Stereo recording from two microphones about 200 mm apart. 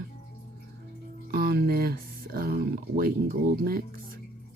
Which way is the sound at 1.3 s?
50° right (ahead or behind).